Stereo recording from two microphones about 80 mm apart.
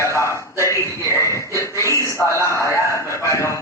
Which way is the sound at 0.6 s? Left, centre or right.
Left.